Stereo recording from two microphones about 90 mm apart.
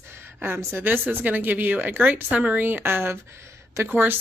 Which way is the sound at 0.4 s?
25° right (ahead or behind).